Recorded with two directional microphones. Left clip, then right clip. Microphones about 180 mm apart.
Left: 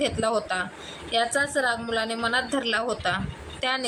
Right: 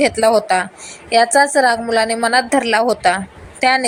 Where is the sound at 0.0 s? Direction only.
35° right (ahead or behind).